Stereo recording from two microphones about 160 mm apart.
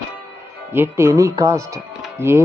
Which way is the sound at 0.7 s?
15° right (ahead or behind).